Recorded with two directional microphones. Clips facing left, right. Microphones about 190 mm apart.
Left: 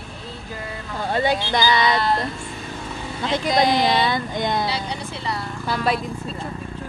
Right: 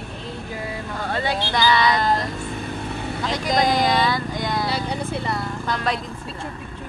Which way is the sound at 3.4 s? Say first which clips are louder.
Left 1 dB; 25° left (ahead or behind).